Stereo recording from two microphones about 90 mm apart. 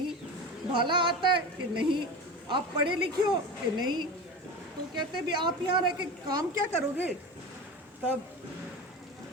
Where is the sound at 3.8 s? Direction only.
55° right (ahead or behind).